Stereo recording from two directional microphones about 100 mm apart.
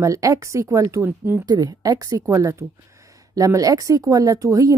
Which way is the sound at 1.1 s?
20° right (ahead or behind).